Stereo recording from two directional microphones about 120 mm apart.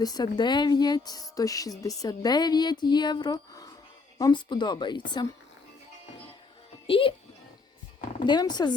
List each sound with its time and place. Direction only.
0.0 s speech: 35° left (ahead or behind)
6.8 s a child's voice: 50° left (ahead or behind)
8.2 s speech: 40° left (ahead or behind)